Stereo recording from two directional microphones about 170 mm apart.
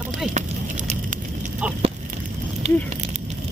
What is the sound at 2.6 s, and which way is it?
Speech, 35° right (ahead or behind).